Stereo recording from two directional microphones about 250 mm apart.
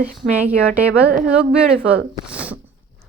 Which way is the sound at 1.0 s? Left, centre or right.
Right.